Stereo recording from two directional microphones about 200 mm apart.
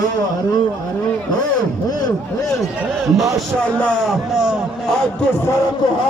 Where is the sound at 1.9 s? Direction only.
20° left (ahead or behind).